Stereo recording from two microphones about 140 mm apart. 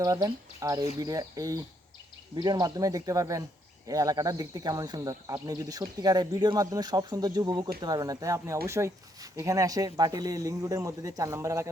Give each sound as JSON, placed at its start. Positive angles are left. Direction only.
{"t": 0.0, "sound": "speech", "side_deg": -25}